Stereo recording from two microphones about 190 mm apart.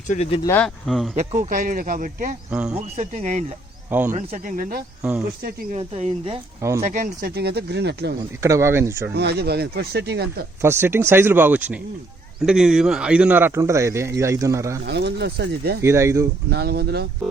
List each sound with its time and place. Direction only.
0.1 s speech: 30° left (ahead or behind)
0.6 s speech: centre (ahead or behind)
1.4 s speech: 45° right (ahead or behind)
2.5 s speech: 5° right (ahead or behind)
2.7 s speech: 35° right (ahead or behind)
5.7 s speech: 35° right (ahead or behind)
6.6 s a man's voice: 15° right (ahead or behind)
6.8 s speech: 45° right (ahead or behind); by 8.1 s 60° right (ahead or behind)
8.2 s a man's voice: 15° right (ahead or behind)
9.1 s speech: 60° right (ahead or behind)
10.6 s a man's voice: 15° right (ahead or behind)
14.8 s speech: 60° right (ahead or behind)
15.8 s a man's voice: 15° right (ahead or behind)
16.5 s speech: 55° right (ahead or behind)